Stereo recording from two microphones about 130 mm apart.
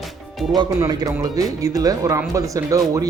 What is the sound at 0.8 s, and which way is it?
Speech, 30° right (ahead or behind).